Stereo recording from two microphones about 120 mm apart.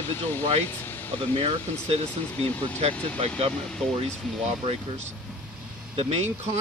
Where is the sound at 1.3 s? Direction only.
55° right (ahead or behind).